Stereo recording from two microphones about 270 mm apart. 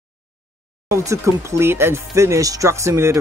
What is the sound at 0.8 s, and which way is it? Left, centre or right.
Speech, centre.